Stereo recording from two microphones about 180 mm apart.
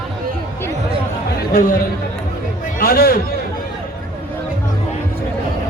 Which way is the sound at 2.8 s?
55° left (ahead or behind).